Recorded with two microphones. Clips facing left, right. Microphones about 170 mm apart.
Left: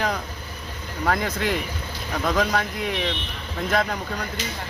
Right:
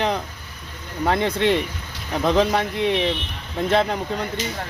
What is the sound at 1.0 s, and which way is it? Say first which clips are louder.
Speech: right 4 dB; 25° right (ahead or behind).